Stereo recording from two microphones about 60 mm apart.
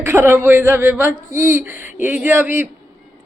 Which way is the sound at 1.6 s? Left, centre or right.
Right.